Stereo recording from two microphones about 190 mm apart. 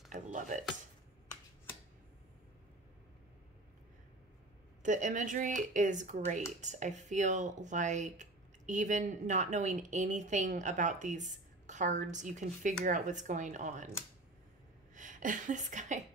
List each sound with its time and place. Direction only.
0.1 s a sound: 40° right (ahead or behind)
4.8 s speech: 40° right (ahead or behind)
15.0 s a woman's voice: 40° right (ahead or behind)